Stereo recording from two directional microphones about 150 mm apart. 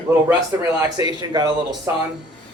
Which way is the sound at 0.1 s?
15° right (ahead or behind).